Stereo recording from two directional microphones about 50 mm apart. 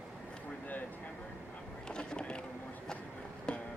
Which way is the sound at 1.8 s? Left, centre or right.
Centre.